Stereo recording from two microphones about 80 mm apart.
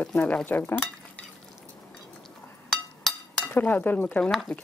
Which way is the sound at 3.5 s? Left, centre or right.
Left.